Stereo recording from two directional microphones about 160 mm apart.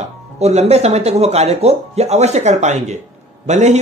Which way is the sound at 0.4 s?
40° right (ahead or behind).